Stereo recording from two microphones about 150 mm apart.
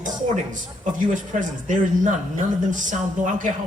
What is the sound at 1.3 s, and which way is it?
Speech, 55° right (ahead or behind).